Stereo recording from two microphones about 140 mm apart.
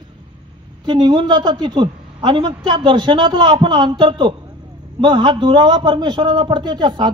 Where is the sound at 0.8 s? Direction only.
35° right (ahead or behind).